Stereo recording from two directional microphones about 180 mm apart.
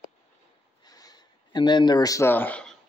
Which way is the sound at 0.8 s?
20° left (ahead or behind).